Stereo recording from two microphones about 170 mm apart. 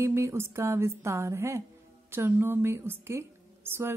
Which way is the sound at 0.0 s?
15° right (ahead or behind).